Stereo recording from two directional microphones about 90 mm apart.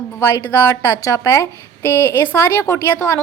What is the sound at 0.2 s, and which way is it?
A woman's voice, 30° left (ahead or behind).